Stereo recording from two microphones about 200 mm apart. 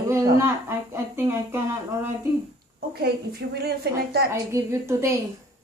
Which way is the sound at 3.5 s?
55° right (ahead or behind).